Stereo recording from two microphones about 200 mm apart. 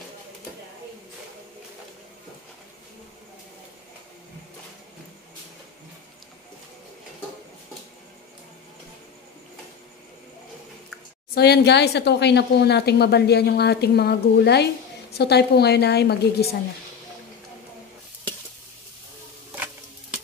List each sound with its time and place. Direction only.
11.3 s speech: 55° left (ahead or behind)